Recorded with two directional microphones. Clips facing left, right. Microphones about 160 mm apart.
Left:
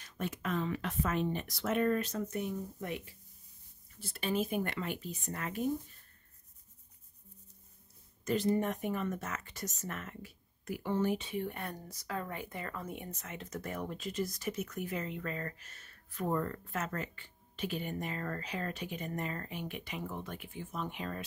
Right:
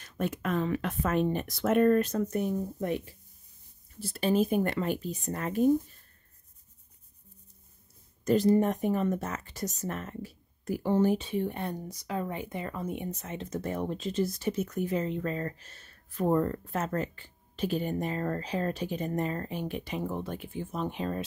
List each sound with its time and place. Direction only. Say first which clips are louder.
0.0 s speech: right 6 dB; 55° right (ahead or behind); by 5.7 s 35° right (ahead or behind)
8.3 s speech: right 7 dB; 35° right (ahead or behind)